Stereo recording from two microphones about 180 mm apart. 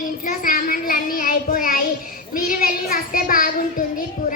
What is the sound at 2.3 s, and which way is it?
Child singing, 50° left (ahead or behind).